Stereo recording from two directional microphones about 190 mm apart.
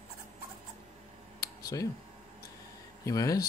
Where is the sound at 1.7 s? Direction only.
15° left (ahead or behind).